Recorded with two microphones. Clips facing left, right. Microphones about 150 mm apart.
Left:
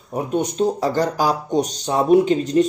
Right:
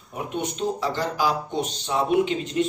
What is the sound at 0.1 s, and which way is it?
Speech, 40° left (ahead or behind).